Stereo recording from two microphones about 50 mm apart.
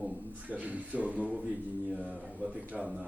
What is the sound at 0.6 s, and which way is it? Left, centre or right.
Speech, right.